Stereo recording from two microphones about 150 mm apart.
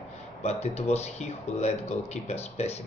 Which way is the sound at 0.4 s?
45° left (ahead or behind).